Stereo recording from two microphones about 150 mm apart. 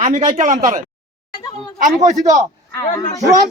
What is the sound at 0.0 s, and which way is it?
Speech, 55° right (ahead or behind).